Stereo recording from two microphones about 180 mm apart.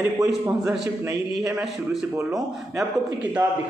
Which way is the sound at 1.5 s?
5° right (ahead or behind).